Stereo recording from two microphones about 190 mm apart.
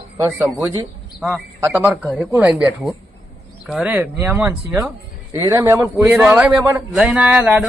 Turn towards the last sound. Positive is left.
turn(degrees=-5)  # may be behind; listen again after turning